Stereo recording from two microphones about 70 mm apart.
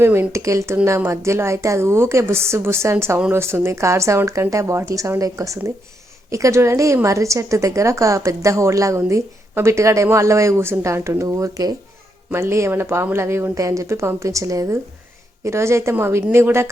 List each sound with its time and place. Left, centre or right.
0.0 s a woman's voice: right
12.3 s a woman's voice: right